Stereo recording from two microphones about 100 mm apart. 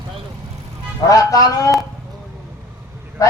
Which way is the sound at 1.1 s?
35° left (ahead or behind).